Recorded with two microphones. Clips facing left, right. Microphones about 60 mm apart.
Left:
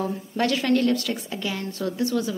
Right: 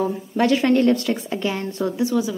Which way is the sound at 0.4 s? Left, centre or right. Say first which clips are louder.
Right 5 dB; right.